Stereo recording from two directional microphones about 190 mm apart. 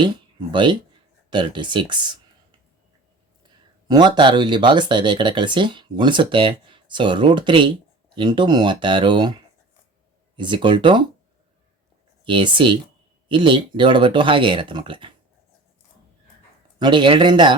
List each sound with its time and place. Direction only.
0.0 s speech: 25° right (ahead or behind)
3.8 s speech: 20° right (ahead or behind)
12.2 s speech: 25° right (ahead or behind)
16.8 s speech: 25° right (ahead or behind)